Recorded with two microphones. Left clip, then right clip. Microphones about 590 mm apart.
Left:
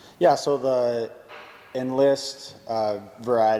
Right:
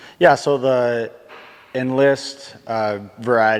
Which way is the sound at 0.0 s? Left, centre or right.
Right.